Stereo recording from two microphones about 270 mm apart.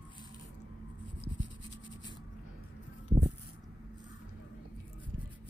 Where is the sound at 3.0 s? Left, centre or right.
Centre.